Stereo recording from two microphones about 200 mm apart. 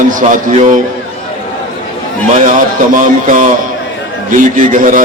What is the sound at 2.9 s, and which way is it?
Speech, 40° right (ahead or behind).